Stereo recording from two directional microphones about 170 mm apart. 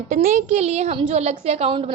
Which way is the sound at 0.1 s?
45° right (ahead or behind).